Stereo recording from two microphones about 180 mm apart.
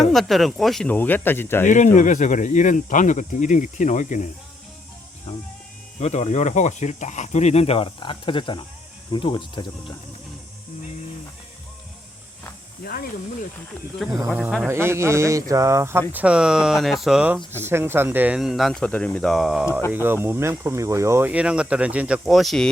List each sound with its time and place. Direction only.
0.0 s speech: centre (ahead or behind)
1.6 s speech: 45° left (ahead or behind)
6.0 s speech: 40° left (ahead or behind)
12.8 s speech: 55° left (ahead or behind)
14.3 s speech: 5° right (ahead or behind)
19.9 s speech: 10° right (ahead or behind)